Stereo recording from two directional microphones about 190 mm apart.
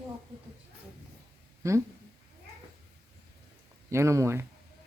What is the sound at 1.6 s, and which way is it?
Speech, 15° right (ahead or behind).